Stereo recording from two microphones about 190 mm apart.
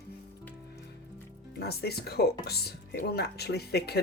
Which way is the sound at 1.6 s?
55° left (ahead or behind).